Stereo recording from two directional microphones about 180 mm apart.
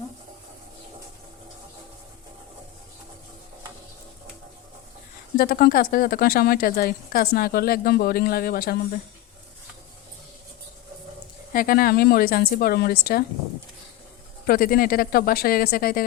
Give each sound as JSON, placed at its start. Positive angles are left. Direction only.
{"t": 5.4, "sound": "a woman's voice", "side_deg": 55}
{"t": 11.5, "sound": "a woman's voice", "side_deg": 55}
{"t": 14.4, "sound": "a woman's voice", "side_deg": 55}